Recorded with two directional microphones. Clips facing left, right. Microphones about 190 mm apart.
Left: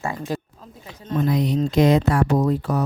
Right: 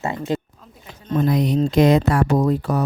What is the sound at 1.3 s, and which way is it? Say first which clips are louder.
Speech: right 2 dB; 50° right (ahead or behind).